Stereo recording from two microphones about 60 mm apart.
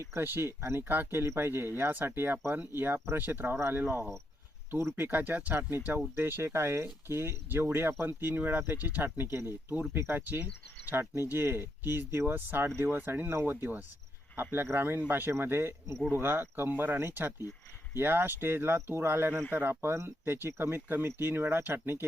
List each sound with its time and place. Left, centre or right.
0.1 s speech: right
16.7 s speech: right
19.8 s speech: right